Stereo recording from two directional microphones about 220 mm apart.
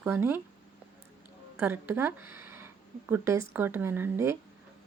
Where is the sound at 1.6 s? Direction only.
10° right (ahead or behind).